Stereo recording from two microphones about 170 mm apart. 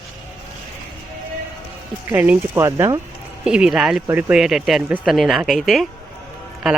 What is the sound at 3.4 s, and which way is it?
Speech, 5° right (ahead or behind).